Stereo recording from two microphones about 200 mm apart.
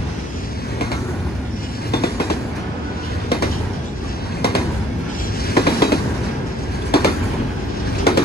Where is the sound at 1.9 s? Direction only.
50° left (ahead or behind).